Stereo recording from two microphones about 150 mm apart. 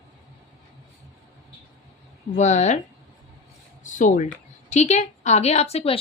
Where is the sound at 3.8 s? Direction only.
60° left (ahead or behind).